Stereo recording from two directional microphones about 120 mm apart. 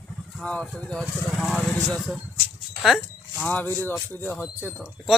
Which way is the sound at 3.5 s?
15° left (ahead or behind).